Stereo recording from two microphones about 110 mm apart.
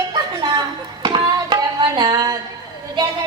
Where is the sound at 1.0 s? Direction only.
45° right (ahead or behind).